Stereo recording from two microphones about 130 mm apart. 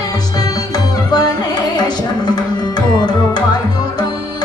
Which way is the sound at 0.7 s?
30° left (ahead or behind).